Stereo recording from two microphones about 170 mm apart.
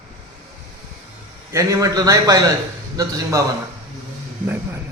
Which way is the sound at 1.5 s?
20° right (ahead or behind).